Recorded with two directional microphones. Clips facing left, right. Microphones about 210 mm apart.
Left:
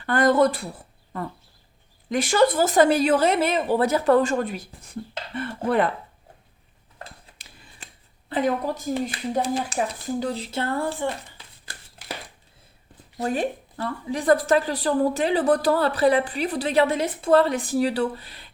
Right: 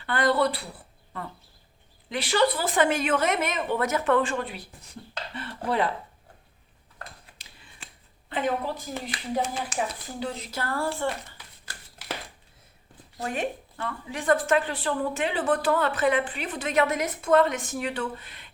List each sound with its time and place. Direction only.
0.0 s speech: 45° left (ahead or behind)
2.0 s a woman's voice: 45° left (ahead or behind)
8.3 s a woman's voice: 40° left (ahead or behind); by 11.1 s 20° left (ahead or behind)
13.2 s a woman's voice: 35° left (ahead or behind)